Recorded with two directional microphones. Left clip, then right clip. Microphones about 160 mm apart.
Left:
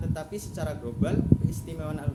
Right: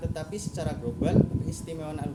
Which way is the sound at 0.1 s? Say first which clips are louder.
Even; 5° right (ahead or behind).